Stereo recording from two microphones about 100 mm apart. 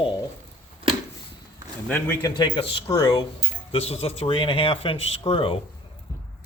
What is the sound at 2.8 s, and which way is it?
Speech, 40° left (ahead or behind).